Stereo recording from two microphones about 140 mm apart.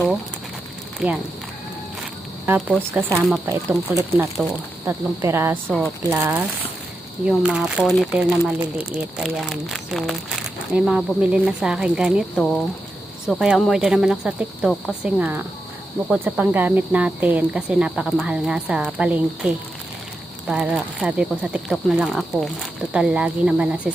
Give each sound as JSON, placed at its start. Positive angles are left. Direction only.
{"t": 0.9, "sound": "speech", "side_deg": -5}
{"t": 2.6, "sound": "speech", "side_deg": -10}
{"t": 3.2, "sound": "speech", "side_deg": 0}
{"t": 3.4, "sound": "speech", "side_deg": -15}
{"t": 7.3, "sound": "speech", "side_deg": -5}
{"t": 13.2, "sound": "speech", "side_deg": -5}